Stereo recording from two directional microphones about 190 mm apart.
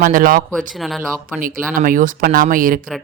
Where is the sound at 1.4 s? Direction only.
45° right (ahead or behind).